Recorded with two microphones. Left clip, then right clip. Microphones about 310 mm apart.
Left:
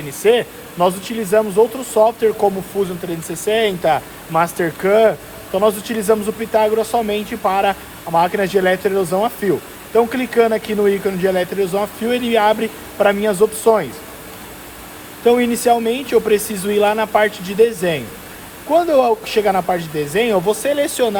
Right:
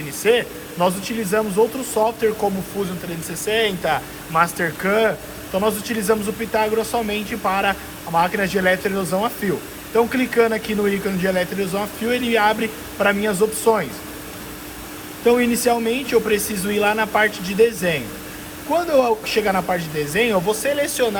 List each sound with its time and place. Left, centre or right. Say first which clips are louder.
0.3 s speech: left 3 dB; left
15.2 s speech: left 3 dB; left